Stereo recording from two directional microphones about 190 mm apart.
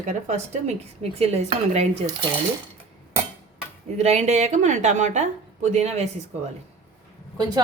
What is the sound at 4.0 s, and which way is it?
A woman's voice, 35° right (ahead or behind).